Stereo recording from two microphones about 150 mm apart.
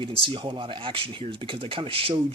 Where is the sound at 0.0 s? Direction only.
35° right (ahead or behind).